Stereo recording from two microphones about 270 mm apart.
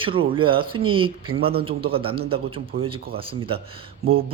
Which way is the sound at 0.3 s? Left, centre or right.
Centre.